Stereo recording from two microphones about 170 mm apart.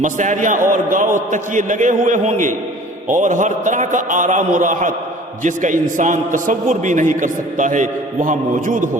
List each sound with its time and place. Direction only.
0.0 s a man's voice: 45° right (ahead or behind)